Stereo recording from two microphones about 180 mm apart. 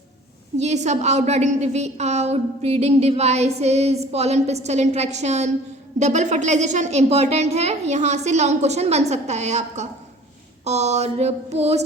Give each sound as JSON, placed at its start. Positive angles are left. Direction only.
{"t": 0.5, "sound": "a woman's voice", "side_deg": -40}